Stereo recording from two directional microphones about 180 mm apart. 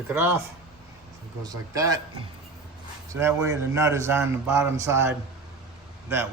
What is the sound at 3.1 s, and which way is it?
Speech, 15° right (ahead or behind).